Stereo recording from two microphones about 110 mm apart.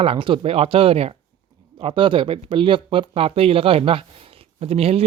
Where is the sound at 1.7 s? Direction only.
50° right (ahead or behind).